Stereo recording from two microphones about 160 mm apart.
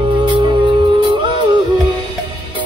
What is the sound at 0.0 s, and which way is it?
Music, 30° right (ahead or behind).